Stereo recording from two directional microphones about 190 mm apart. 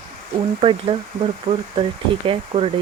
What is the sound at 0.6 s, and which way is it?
Speech, 30° right (ahead or behind).